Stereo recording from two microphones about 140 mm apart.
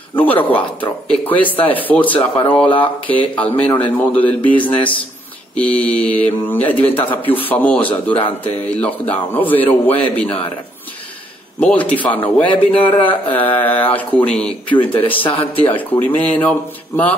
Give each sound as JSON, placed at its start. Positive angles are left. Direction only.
{"t": 0.1, "sound": "speech", "side_deg": 10}
{"t": 11.6, "sound": "speech", "side_deg": 10}
{"t": 15.1, "sound": "a man's voice", "side_deg": 40}
{"t": 15.7, "sound": "speech", "side_deg": 10}